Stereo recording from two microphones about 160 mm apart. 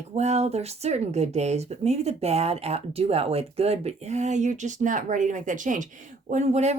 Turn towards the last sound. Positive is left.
turn(degrees=-45)  # may be behind; listen again after turning